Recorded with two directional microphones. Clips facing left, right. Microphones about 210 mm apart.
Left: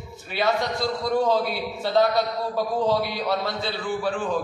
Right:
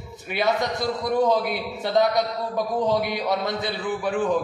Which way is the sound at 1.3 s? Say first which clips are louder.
Even; 20° right (ahead or behind).